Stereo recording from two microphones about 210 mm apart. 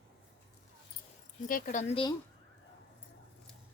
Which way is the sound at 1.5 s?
35° left (ahead or behind).